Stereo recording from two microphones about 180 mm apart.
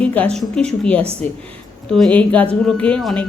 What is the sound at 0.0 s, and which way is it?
Speech, 5° left (ahead or behind).